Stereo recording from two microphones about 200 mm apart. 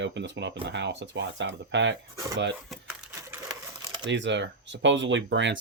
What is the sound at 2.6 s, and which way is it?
Coin, centre (ahead or behind).